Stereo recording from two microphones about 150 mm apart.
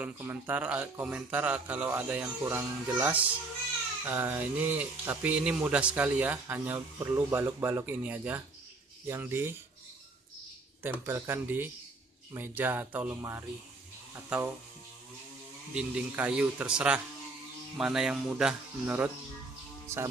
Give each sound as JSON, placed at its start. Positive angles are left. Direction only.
{"t": 0.0, "sound": "speech", "side_deg": -10}
{"t": 10.8, "sound": "speech", "side_deg": -15}
{"t": 15.7, "sound": "speech", "side_deg": -5}
{"t": 19.9, "sound": "speech", "side_deg": -15}